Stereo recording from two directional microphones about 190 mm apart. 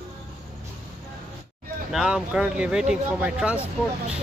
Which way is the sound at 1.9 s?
5° right (ahead or behind).